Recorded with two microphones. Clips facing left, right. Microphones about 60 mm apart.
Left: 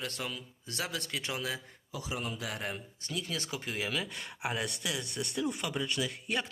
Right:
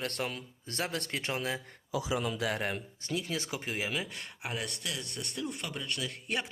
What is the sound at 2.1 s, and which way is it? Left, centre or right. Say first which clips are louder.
Speech: right 4 dB; right.